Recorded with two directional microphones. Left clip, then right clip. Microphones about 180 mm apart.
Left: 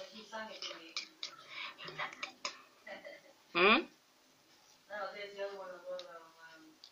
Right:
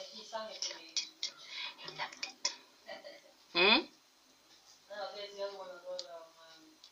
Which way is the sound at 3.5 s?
30° right (ahead or behind).